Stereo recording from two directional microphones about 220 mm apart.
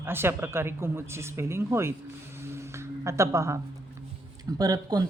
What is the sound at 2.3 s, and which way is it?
Music, 10° right (ahead or behind).